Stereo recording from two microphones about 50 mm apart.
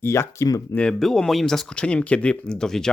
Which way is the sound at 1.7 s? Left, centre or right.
Left.